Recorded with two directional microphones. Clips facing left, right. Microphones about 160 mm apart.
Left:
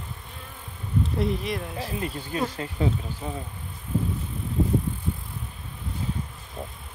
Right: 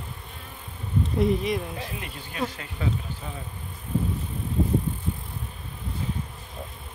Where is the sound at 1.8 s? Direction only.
30° left (ahead or behind).